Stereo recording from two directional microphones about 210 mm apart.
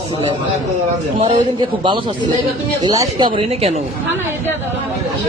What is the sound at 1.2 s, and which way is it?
A man's voice, 25° right (ahead or behind).